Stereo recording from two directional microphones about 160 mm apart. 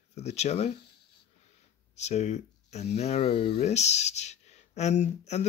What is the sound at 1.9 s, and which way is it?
Speech, 45° left (ahead or behind).